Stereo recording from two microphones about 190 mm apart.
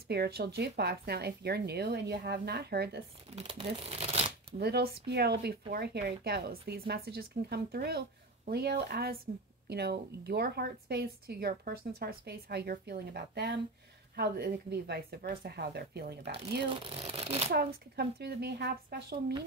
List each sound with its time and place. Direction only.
0.1 s a woman's voice: 55° right (ahead or behind)
3.3 s speech: 30° right (ahead or behind)
4.5 s a woman's voice: 60° right (ahead or behind)
16.4 s speech: 25° right (ahead or behind)
17.5 s a woman's voice: 55° right (ahead or behind)